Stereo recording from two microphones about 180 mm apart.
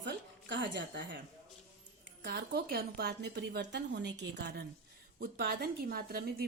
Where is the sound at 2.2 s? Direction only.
65° right (ahead or behind).